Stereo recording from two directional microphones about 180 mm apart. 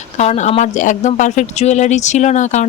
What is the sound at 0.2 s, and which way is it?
Speech, 40° left (ahead or behind).